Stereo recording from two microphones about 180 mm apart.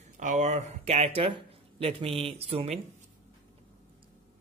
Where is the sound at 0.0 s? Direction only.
40° right (ahead or behind).